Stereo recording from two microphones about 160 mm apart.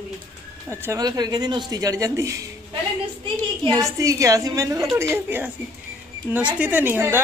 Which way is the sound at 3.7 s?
20° right (ahead or behind).